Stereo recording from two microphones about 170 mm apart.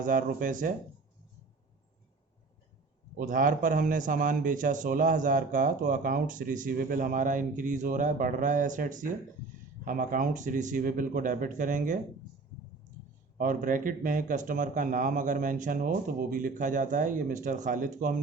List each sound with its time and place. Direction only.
0.0 s a man's voice: 50° right (ahead or behind)
3.2 s a man's voice: 50° right (ahead or behind)
13.4 s a man's voice: 50° right (ahead or behind)